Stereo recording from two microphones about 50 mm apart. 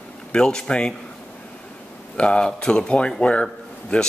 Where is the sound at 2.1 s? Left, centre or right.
Left.